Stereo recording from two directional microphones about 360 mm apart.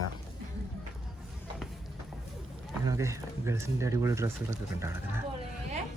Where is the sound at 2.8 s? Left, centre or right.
Centre.